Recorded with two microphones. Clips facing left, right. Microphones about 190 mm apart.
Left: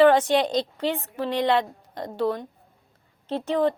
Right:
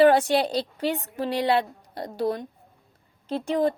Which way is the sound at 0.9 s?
40° right (ahead or behind).